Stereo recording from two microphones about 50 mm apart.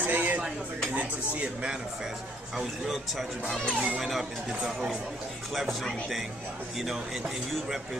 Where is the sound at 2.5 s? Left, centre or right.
Centre.